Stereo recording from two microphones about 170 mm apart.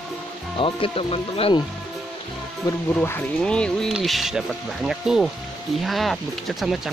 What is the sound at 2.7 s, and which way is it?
Speech, 15° left (ahead or behind).